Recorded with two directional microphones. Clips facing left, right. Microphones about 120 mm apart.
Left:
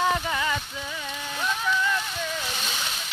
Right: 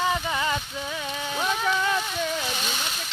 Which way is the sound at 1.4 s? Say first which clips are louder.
Right 1 dB; 60° right (ahead or behind).